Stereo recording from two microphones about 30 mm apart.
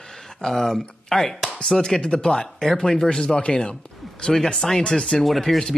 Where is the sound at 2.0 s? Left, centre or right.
Left.